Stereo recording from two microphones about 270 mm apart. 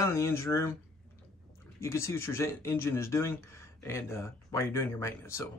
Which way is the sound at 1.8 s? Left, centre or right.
Centre.